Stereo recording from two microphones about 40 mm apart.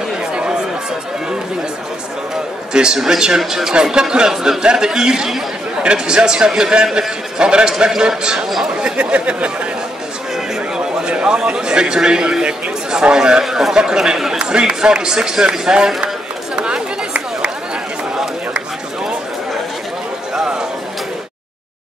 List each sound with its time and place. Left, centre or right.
0.3 s chatter: right
2.7 s a man's voice: centre
8.8 s speech: right
11.0 s a man's voice: right
14.4 s speech: right
16.5 s chatter: centre